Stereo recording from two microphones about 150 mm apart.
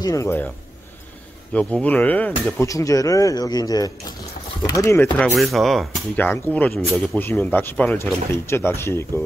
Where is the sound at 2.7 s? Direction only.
20° left (ahead or behind).